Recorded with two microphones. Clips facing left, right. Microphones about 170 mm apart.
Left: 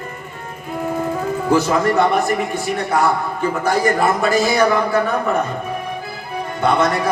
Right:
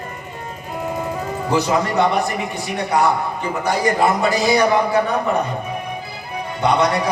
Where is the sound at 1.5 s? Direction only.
50° left (ahead or behind).